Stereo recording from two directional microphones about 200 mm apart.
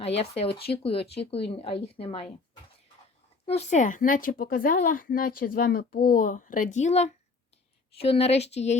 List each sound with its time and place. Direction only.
0.0 s speech: 30° left (ahead or behind)
3.4 s a woman's voice: 30° left (ahead or behind)